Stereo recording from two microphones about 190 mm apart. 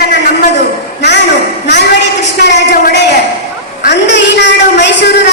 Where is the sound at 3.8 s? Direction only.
65° left (ahead or behind).